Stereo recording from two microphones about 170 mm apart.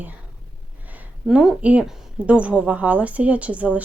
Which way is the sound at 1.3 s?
5° right (ahead or behind).